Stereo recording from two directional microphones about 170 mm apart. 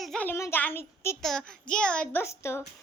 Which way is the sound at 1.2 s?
5° left (ahead or behind).